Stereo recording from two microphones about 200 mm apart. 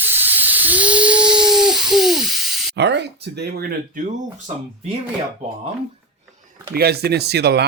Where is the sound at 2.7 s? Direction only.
60° right (ahead or behind).